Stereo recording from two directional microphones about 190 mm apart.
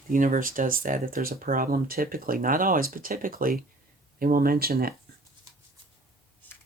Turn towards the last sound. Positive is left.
turn(degrees=10)  # may be behind; listen again after turning